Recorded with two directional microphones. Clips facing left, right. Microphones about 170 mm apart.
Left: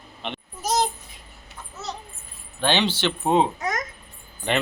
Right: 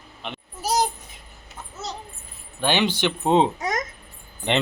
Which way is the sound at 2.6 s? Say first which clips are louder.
Right 1 dB; 10° right (ahead or behind).